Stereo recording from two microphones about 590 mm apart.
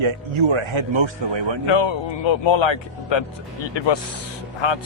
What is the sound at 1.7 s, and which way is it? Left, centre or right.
Speech, left.